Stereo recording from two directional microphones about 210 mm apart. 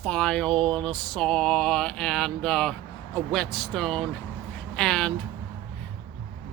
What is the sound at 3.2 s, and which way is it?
Speech, centre (ahead or behind).